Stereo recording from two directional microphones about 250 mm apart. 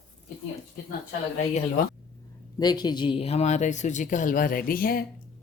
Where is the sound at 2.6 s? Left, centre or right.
Centre.